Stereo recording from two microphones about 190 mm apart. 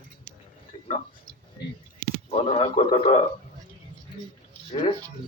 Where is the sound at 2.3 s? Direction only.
30° left (ahead or behind).